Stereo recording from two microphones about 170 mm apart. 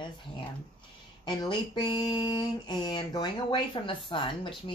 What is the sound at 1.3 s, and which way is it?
Speech, 25° left (ahead or behind).